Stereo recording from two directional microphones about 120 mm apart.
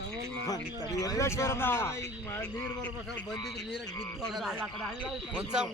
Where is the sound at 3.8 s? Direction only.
30° left (ahead or behind).